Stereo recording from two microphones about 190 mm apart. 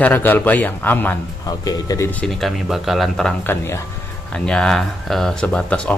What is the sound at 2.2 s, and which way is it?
Speech, centre (ahead or behind).